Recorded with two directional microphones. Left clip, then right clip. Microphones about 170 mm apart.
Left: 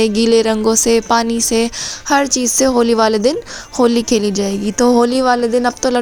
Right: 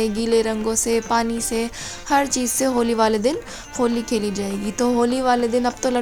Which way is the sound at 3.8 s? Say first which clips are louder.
Left 8 dB; 45° left (ahead or behind).